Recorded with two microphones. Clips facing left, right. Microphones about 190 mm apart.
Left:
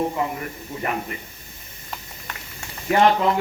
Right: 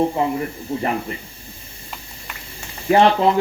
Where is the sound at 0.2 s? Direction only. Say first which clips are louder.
Right 5 dB; 30° right (ahead or behind).